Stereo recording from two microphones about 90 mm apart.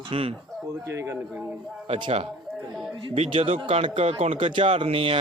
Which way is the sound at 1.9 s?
80° right.